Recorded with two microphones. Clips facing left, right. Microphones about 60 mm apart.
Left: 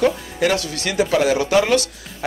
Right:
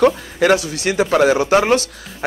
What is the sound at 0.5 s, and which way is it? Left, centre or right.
Speech, right.